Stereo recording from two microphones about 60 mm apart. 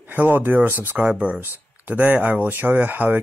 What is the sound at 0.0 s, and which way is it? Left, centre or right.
Speech, right.